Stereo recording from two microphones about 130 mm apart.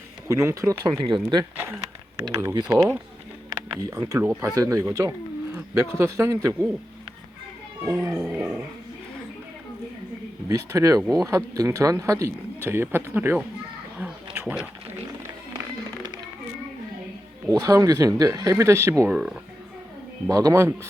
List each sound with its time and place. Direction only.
0.3 s speech: 20° right (ahead or behind)
0.9 s speech: 35° right (ahead or behind)
1.5 s speech: 15° right (ahead or behind)
7.9 s speech: 20° right (ahead or behind)
8.3 s dog: 10° right (ahead or behind)
10.5 s speech: 25° right (ahead or behind)
11.0 s speech: centre (ahead or behind)
11.3 s speech: 25° right (ahead or behind)
14.0 s a sound: 10° right (ahead or behind)
17.5 s speech: 25° right (ahead or behind)
20.2 s speech: 25° right (ahead or behind)